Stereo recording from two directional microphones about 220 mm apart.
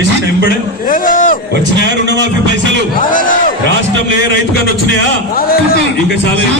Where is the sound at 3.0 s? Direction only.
40° left (ahead or behind).